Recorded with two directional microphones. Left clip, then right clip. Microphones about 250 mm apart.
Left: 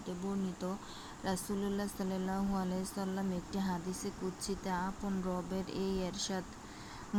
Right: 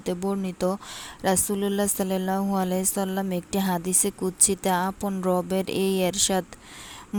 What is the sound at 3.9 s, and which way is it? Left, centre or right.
Speech, right.